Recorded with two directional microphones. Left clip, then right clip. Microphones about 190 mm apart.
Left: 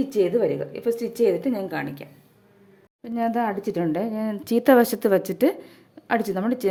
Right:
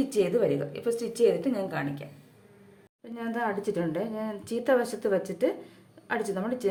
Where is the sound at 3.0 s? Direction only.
45° left (ahead or behind).